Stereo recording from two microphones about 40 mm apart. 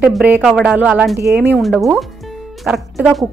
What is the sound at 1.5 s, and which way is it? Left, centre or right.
Speech, centre.